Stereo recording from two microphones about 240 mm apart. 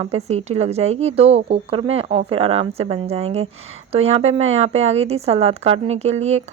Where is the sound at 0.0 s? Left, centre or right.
Right.